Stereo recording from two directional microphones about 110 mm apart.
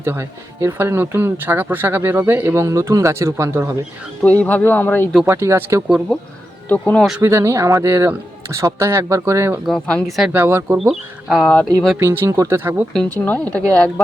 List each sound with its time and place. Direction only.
0.0 s speech: 25° right (ahead or behind)
4.2 s speech: 15° left (ahead or behind)
5.2 s speech: 25° right (ahead or behind)
6.7 s speech: 15° left (ahead or behind)
7.2 s speech: 25° right (ahead or behind)
9.6 s speech: 5° left (ahead or behind)
10.3 s speech: 20° right (ahead or behind)
10.8 s speech: 5° right (ahead or behind)
11.9 s speech: 25° right (ahead or behind)
12.9 s speech: 5° left (ahead or behind)